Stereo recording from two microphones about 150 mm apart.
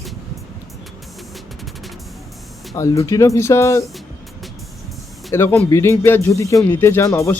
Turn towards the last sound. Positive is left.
turn(degrees=20)  # may be behind; listen again after turning